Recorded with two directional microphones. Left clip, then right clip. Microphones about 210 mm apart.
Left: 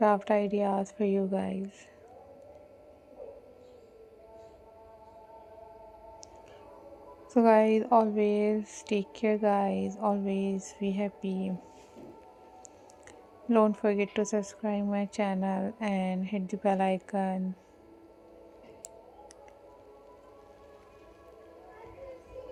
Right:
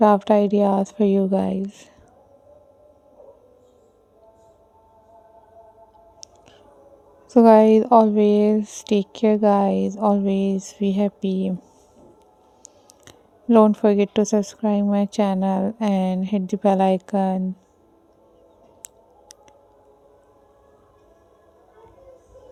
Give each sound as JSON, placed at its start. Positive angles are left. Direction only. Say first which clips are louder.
{"t": 0.0, "sound": "a woman's voice", "louder": "right 9 dB", "side_deg": -60}
{"t": 7.3, "sound": "a woman's voice", "louder": "right 10 dB", "side_deg": -60}
{"t": 13.1, "sound": "a woman's voice", "louder": "right 11 dB", "side_deg": -60}